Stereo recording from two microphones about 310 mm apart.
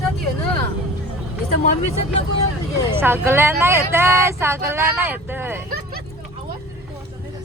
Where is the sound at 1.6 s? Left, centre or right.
Left.